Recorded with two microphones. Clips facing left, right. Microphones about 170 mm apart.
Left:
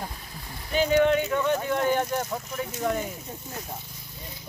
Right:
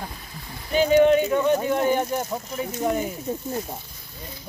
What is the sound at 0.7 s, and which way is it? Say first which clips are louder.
Speech: right 5 dB; 20° right (ahead or behind).